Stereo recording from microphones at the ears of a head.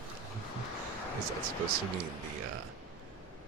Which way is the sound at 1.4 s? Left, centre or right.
Right.